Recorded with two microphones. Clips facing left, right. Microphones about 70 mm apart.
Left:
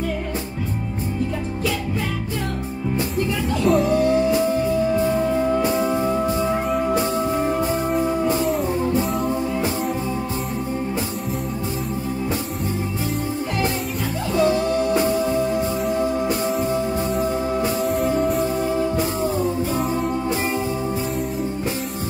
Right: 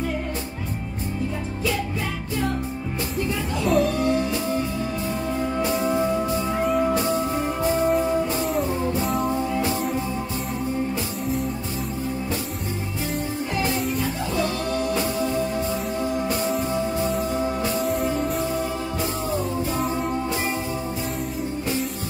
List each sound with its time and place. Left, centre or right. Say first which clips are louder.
3.6 s music: left 2 dB; centre
5.6 s music: left 3 dB; left
14.3 s music: left 9 dB; left
17.8 s music: left 4 dB; centre